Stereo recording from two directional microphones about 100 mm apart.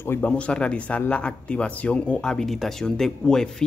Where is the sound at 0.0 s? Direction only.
20° left (ahead or behind).